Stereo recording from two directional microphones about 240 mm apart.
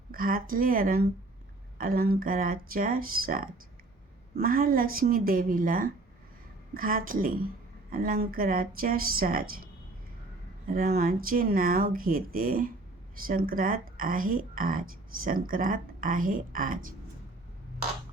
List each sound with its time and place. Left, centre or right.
0.1 s speech: right
10.7 s speech: right